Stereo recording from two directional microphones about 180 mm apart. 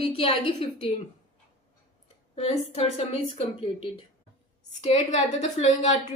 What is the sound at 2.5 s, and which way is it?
A woman's voice, 35° left (ahead or behind).